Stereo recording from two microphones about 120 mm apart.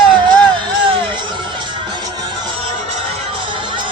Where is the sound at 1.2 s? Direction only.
40° right (ahead or behind).